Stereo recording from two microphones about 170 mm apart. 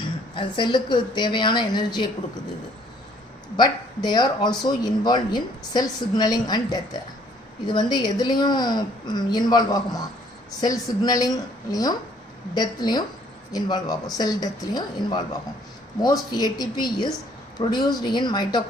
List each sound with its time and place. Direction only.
0.0 s a woman's voice: 30° left (ahead or behind)
3.6 s a woman's voice: 25° left (ahead or behind)